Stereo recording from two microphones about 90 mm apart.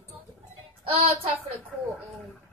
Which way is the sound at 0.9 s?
90° right.